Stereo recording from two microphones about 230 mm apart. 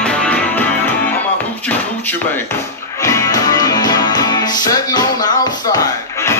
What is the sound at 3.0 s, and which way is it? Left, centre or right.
Music, centre.